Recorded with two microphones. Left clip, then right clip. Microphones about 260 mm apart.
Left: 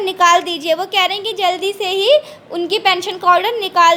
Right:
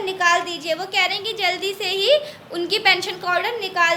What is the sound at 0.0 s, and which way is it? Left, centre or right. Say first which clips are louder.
A woman's voice: left 7 dB; left.